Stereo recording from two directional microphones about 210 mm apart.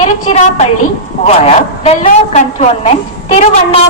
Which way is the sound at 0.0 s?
30° left (ahead or behind).